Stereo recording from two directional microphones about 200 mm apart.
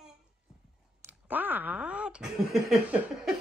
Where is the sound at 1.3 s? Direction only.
10° right (ahead or behind).